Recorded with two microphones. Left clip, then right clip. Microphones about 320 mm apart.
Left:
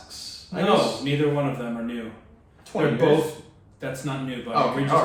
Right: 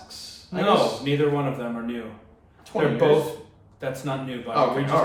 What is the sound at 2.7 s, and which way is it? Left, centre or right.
Speech, centre.